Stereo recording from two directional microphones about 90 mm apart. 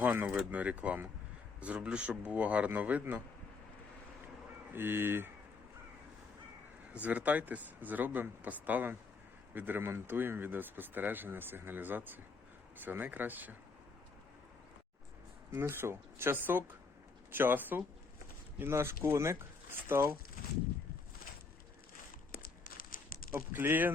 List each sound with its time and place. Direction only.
0.0 s a man's voice: 15° right (ahead or behind)
4.7 s speech: 25° right (ahead or behind)
6.9 s speech: 15° right (ahead or behind)
15.5 s speech: 25° right (ahead or behind)
23.5 s speech: 25° right (ahead or behind)